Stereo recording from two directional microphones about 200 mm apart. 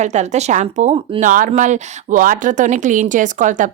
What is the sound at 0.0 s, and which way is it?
Speech, 35° right (ahead or behind).